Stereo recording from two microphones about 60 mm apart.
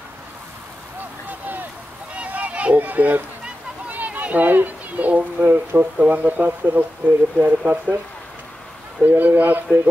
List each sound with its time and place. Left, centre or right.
1.2 s a sound: right
2.1 s run: right
3.9 s speech: right
9.0 s speech: right